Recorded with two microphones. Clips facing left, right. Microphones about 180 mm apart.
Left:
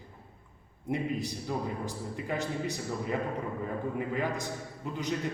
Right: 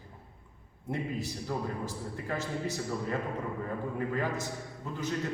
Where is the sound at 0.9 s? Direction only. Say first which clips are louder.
Left 3 dB; 15° left (ahead or behind).